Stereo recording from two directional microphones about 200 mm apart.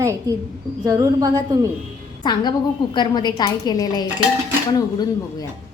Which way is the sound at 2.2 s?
20° left (ahead or behind).